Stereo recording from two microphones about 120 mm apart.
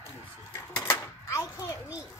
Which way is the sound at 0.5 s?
20° left (ahead or behind).